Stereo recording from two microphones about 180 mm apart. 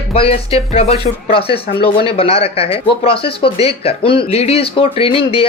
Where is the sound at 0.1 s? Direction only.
30° left (ahead or behind).